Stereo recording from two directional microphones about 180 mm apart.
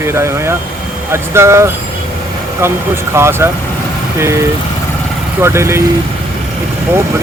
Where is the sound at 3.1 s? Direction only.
15° right (ahead or behind).